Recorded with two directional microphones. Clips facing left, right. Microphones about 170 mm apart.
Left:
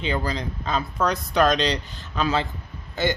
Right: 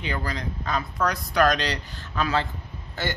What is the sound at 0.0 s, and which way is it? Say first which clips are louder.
Speech: left 4 dB; 25° left (ahead or behind).